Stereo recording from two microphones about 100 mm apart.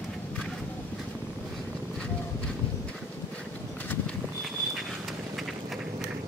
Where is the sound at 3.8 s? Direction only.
15° left (ahead or behind).